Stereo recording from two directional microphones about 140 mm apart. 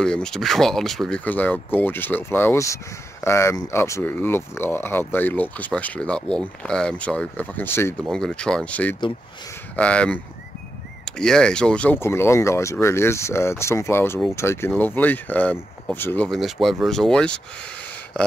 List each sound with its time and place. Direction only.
0.0 s speech: 5° left (ahead or behind)
8.0 s speech: 5° left (ahead or behind)
16.3 s speech: centre (ahead or behind)